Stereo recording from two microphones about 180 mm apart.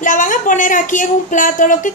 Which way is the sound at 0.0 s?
45° left (ahead or behind).